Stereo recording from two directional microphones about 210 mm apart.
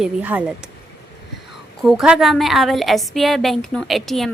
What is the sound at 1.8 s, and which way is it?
A woman's voice, centre (ahead or behind).